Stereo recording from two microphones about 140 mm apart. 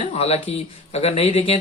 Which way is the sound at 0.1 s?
45° left (ahead or behind).